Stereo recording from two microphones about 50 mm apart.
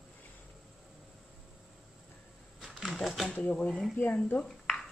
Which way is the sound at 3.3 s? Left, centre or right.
Left.